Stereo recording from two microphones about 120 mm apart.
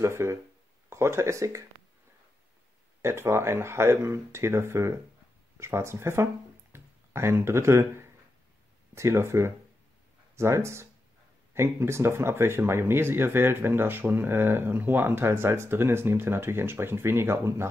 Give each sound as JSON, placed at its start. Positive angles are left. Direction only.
{"t": 0.0, "sound": "speech", "side_deg": -20}
{"t": 3.0, "sound": "speech", "side_deg": -20}
{"t": 6.7, "sound": "a sound", "side_deg": -20}
{"t": 8.9, "sound": "speech", "side_deg": -20}